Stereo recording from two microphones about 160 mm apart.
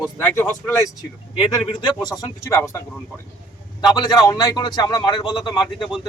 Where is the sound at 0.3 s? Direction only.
15° left (ahead or behind).